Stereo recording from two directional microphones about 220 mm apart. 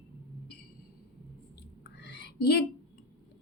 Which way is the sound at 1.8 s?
50° left (ahead or behind).